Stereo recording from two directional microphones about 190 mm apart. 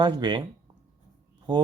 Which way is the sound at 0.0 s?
25° right (ahead or behind).